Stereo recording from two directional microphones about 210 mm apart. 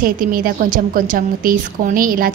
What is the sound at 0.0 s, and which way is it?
A woman's voice, 40° right (ahead or behind).